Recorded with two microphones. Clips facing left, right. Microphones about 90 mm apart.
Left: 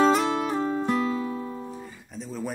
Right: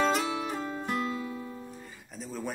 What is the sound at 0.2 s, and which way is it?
Music, 75° left (ahead or behind).